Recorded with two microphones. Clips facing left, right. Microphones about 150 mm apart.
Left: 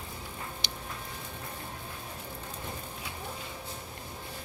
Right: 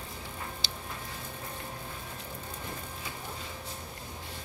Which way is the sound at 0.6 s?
20° left (ahead or behind).